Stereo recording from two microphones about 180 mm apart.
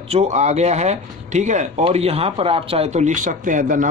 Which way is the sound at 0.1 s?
40° right (ahead or behind).